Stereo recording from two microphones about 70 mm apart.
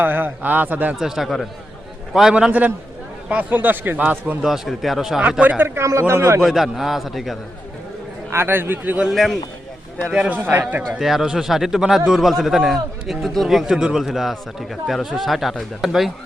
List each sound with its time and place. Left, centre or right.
0.0 s a man's voice: right
0.9 s a man's voice: centre
2.5 s a man's voice: right
4.4 s a man's voice: centre
5.4 s a man's voice: right
5.8 s a man's voice: right
6.4 s a man's voice: centre
8.3 s a man's voice: right
9.0 s a man's voice: centre
10.1 s a man's voice: centre
10.9 s a man's voice: centre